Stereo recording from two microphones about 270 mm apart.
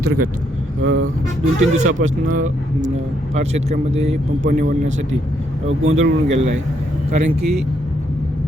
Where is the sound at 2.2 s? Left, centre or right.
Right.